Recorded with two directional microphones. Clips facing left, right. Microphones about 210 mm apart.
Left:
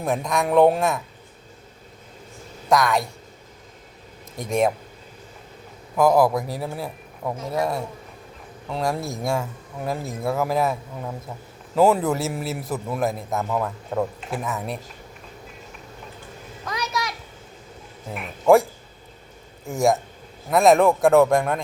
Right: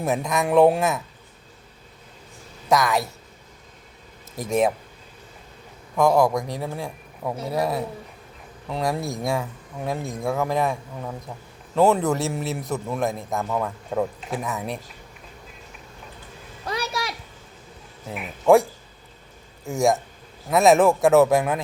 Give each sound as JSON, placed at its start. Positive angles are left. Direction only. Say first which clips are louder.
{"t": 0.0, "sound": "a man's voice", "louder": "even", "side_deg": 0}
{"t": 2.6, "sound": "speech", "louder": "left 1 dB", "side_deg": 0}
{"t": 4.4, "sound": "a man's voice", "louder": "even", "side_deg": 0}
{"t": 6.0, "sound": "a man's voice", "louder": "left 1 dB", "side_deg": 5}
{"t": 16.6, "sound": "a sound", "louder": "even", "side_deg": -30}
{"t": 18.1, "sound": "a man's voice", "louder": "even", "side_deg": 0}